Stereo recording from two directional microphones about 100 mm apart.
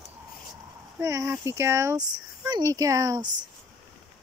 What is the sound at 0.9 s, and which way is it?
Speech, 30° right (ahead or behind).